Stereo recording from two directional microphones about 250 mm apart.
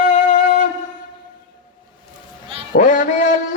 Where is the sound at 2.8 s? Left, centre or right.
Left.